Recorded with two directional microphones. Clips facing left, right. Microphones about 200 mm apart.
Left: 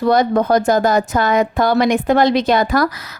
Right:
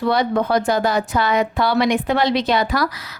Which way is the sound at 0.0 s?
45° left (ahead or behind).